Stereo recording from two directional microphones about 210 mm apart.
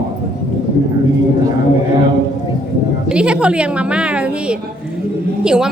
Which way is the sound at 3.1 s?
5° right (ahead or behind).